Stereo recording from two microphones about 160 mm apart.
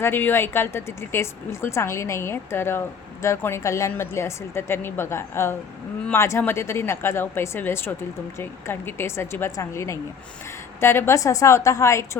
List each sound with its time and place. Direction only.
0.0 s a woman's voice: 15° left (ahead or behind)